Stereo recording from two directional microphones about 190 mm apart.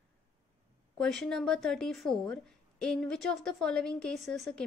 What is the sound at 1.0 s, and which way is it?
A woman's voice, 5° left (ahead or behind).